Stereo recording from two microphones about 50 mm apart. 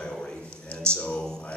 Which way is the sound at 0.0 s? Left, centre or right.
Centre.